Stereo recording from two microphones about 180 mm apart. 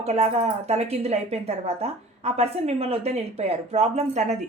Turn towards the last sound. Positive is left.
turn(degrees=-40)  # may be behind; listen again after turning